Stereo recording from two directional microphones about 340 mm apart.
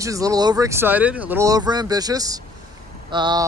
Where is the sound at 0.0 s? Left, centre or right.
Centre.